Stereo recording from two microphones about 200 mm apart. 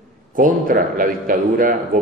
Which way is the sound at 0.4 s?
45° right (ahead or behind).